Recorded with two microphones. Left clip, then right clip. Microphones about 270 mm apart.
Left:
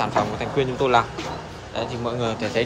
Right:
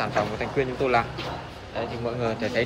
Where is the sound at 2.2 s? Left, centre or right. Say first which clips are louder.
Left 2 dB; centre.